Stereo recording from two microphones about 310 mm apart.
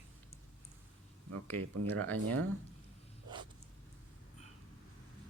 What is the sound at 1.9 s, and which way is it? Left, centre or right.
Speech, centre.